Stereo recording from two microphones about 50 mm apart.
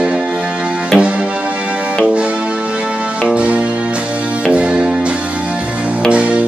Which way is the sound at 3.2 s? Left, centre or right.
Right.